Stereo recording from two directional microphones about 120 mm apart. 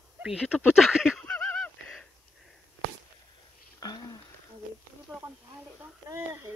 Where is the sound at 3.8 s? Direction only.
35° left (ahead or behind).